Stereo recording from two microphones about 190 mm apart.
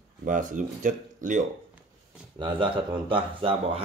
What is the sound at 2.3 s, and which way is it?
Speech, 25° right (ahead or behind).